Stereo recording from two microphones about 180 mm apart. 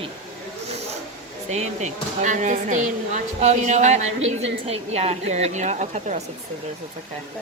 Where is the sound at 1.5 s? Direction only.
40° right (ahead or behind).